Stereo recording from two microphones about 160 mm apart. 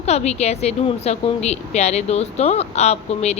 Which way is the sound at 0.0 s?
45° left (ahead or behind).